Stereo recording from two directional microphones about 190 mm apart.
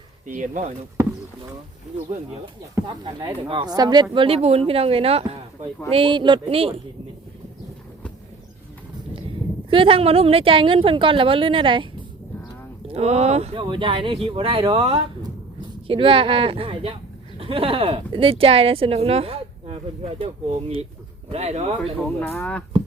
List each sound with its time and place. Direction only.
0.3 s speech: 40° right (ahead or behind)
2.7 s speech: 25° right (ahead or behind)
9.6 s speech: 30° right (ahead or behind)
12.9 s speech: 35° right (ahead or behind)
22.2 s speech: 5° left (ahead or behind)